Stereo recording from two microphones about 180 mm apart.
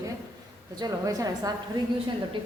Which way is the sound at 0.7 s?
20° right (ahead or behind).